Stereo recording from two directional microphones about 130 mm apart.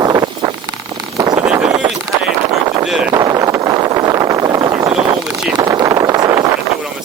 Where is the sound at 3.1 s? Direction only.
25° right (ahead or behind).